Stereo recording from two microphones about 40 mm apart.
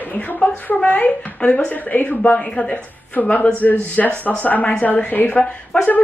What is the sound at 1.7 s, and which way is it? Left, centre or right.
A woman's voice, left.